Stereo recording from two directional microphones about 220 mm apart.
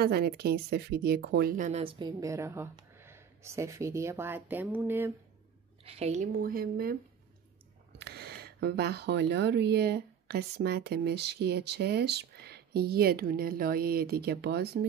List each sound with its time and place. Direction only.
0.0 s speech: 45° right (ahead or behind)
1.7 s speech: 25° right (ahead or behind)
5.9 s speech: 30° right (ahead or behind)
8.0 s speech: 45° right (ahead or behind)